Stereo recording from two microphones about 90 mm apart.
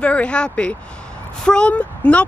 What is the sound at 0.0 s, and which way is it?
Speech, 15° left (ahead or behind).